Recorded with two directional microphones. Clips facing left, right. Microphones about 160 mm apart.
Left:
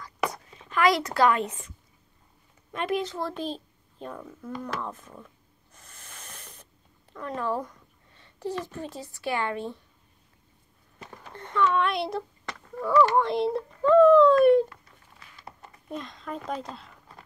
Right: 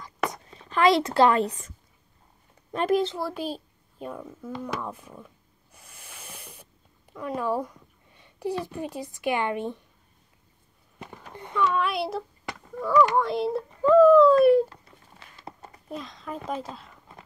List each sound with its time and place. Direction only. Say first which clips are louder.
0.5 s speech: right 3 dB; 30° right (ahead or behind)
2.7 s a woman's voice: right 5 dB; 35° right (ahead or behind)
3.2 s a child's voice: right 1 dB; 10° right (ahead or behind)
4.6 s a sound: right 1 dB; 5° right (ahead or behind)
8.6 s speech: right 4 dB; 15° right (ahead or behind)
11.1 s speech: even; 10° right (ahead or behind)
14.4 s a sound: even; 5° right (ahead or behind)
14.7 s a sound: right 2 dB; 30° right (ahead or behind)
15.9 s speech: even; centre (ahead or behind)